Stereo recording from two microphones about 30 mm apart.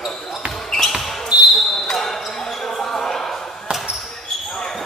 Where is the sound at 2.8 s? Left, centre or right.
Centre.